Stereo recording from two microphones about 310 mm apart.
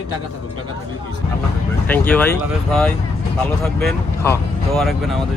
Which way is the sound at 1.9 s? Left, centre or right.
Centre.